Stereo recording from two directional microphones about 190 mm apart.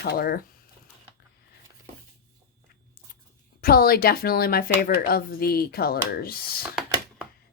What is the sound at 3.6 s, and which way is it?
A woman's voice, 50° left (ahead or behind).